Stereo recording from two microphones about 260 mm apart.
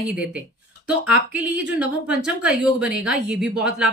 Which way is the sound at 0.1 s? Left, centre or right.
Centre.